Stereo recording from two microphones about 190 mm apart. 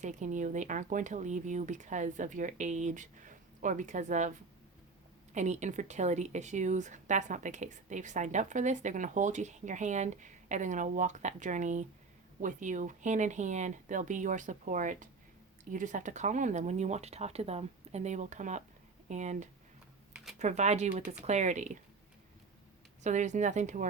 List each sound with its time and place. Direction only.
0.0 s speech: 40° right (ahead or behind)
23.0 s speech: 40° right (ahead or behind)